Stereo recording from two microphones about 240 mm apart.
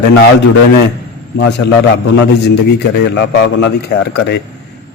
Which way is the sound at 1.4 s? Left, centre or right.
Left.